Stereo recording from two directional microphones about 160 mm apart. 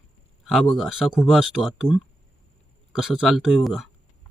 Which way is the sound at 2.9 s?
Centre (ahead or behind).